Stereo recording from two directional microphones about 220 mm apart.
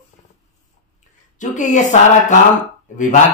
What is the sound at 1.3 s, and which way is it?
A man's voice, 35° left (ahead or behind).